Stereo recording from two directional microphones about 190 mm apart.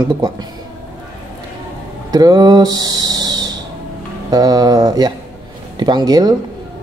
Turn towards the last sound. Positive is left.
turn(degrees=-20)  # may be behind; listen again after turning